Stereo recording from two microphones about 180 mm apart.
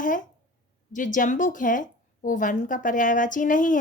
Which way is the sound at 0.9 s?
45° left (ahead or behind).